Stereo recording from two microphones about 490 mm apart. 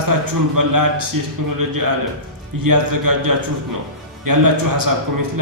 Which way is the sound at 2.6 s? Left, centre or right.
Right.